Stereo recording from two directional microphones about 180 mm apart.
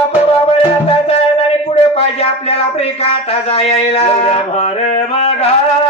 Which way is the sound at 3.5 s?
35° left (ahead or behind).